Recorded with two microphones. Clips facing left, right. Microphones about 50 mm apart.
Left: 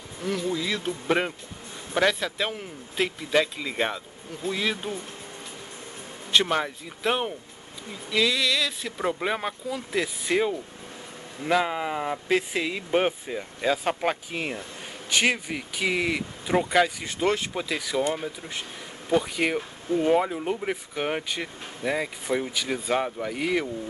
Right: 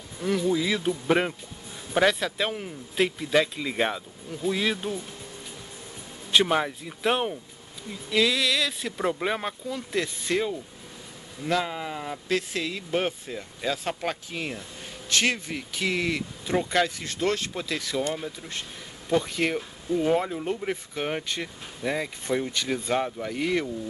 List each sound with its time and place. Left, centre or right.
0.2 s speech: centre
6.3 s speech: centre